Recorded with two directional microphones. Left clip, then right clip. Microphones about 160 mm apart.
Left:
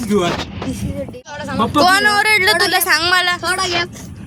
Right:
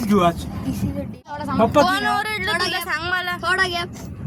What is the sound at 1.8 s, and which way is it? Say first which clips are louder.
Speech: left 6 dB; 25° left (ahead or behind).